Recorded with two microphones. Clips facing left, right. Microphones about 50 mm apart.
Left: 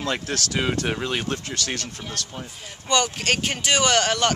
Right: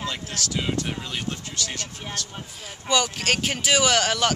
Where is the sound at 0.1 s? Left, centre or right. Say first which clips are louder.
Left 4 dB; left.